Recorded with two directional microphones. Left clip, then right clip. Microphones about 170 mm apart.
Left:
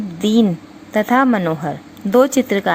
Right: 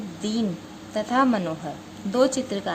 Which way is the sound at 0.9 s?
40° left (ahead or behind).